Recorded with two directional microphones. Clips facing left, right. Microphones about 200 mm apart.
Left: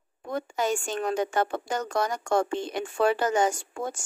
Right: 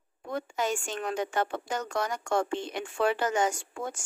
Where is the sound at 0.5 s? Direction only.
40° left (ahead or behind).